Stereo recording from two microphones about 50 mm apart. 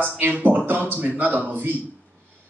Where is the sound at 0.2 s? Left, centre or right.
Right.